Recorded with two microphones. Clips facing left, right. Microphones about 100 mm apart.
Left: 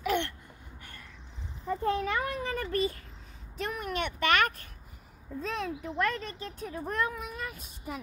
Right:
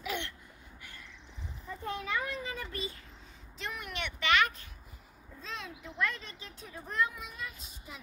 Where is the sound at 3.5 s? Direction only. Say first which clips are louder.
Left 7 dB; 45° left (ahead or behind).